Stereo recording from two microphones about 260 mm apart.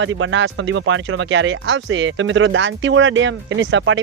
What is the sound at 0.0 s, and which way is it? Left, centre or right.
Speech, right.